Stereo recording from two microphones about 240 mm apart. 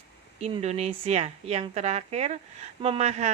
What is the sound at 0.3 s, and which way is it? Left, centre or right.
A woman's voice, right.